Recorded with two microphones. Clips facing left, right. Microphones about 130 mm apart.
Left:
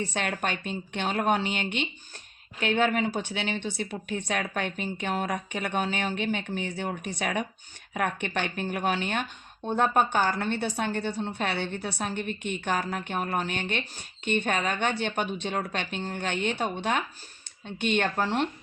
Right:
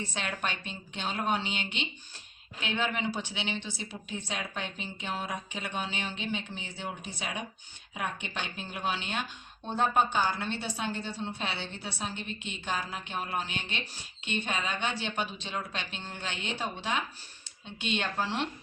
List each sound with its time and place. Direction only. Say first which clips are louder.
0.0 s a woman's voice: left 5 dB; 50° left (ahead or behind)